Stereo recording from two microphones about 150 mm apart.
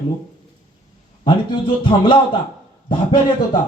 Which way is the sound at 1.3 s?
35° left (ahead or behind).